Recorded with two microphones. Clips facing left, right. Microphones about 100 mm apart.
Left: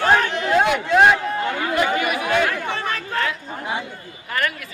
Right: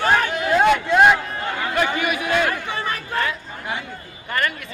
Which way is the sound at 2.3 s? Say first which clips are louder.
Left 1 dB; 10° right (ahead or behind).